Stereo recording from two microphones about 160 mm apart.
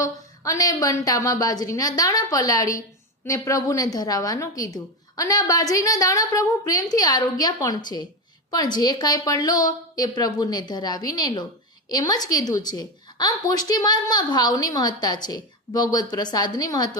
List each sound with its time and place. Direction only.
0.0 s a woman's voice: 20° left (ahead or behind)